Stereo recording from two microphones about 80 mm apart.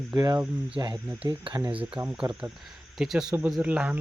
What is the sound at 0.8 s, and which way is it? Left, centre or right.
Speech, right.